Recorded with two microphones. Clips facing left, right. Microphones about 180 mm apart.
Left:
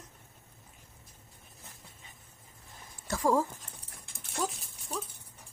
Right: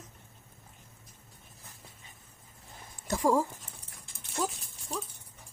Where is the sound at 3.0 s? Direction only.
15° right (ahead or behind).